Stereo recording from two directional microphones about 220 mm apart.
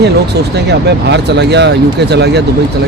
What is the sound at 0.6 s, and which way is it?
Speech, 50° right (ahead or behind).